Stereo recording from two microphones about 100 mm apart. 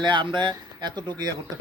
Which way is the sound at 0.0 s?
55° right (ahead or behind).